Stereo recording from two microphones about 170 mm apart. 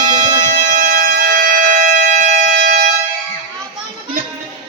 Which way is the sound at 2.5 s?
75° right (ahead or behind).